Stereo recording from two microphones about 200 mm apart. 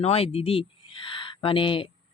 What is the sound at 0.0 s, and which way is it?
Speech, 30° left (ahead or behind).